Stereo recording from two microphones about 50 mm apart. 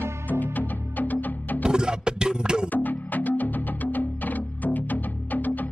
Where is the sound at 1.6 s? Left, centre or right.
Centre.